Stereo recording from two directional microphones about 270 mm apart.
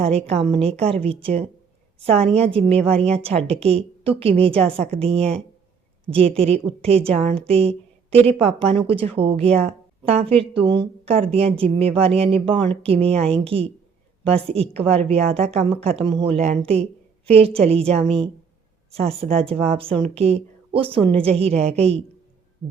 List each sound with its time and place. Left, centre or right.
0.0 s a woman's voice: right